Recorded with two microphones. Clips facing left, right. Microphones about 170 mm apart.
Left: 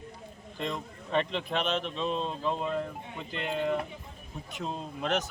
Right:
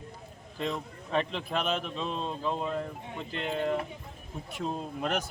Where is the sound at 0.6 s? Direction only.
Centre (ahead or behind).